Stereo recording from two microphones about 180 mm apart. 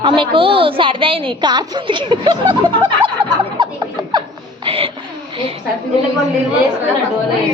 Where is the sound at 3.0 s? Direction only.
25° right (ahead or behind).